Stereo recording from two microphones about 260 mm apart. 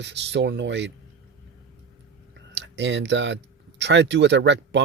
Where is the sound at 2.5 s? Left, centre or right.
Right.